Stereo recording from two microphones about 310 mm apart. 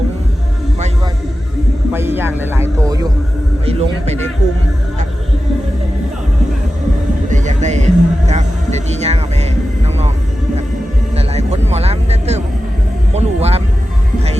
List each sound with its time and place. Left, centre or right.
1.9 s a sound: centre
7.3 s music: right
11.1 s music: centre
13.1 s vehicle: centre